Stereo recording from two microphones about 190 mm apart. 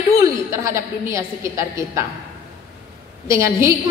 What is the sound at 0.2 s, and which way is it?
A woman's voice, 15° right (ahead or behind).